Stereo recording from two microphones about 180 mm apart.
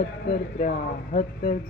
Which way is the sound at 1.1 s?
35° left (ahead or behind).